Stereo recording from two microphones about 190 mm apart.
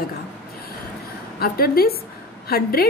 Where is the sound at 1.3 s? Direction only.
50° left (ahead or behind).